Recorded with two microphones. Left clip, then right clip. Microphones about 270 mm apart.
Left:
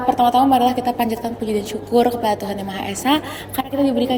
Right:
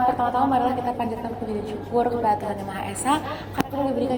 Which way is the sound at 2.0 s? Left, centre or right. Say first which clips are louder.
Left 4 dB; left.